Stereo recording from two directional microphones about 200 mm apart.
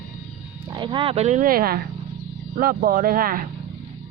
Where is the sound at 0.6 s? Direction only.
20° right (ahead or behind); by 3.4 s 45° right (ahead or behind).